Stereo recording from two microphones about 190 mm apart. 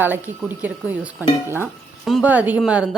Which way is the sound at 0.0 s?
10° right (ahead or behind).